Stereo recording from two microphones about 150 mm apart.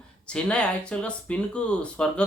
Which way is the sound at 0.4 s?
5° left (ahead or behind).